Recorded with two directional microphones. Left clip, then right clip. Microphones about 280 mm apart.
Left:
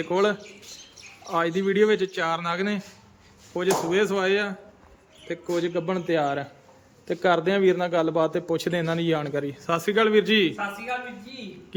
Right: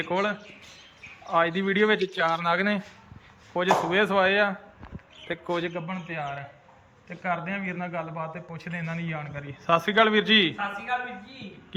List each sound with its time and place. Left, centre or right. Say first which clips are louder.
0.0 s a man's voice: left 4 dB; centre